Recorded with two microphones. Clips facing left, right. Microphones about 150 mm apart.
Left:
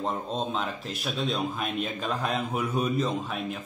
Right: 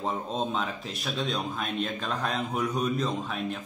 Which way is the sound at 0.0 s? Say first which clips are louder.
Even; centre (ahead or behind).